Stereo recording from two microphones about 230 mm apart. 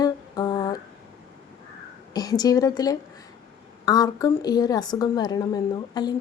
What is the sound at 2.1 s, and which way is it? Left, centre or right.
A woman's voice, centre.